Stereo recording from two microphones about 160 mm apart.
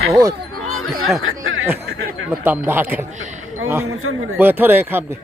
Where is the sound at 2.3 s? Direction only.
10° right (ahead or behind).